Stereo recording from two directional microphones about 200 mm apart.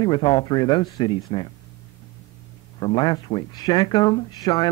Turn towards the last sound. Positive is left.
turn(degrees=20)  # may be behind; listen again after turning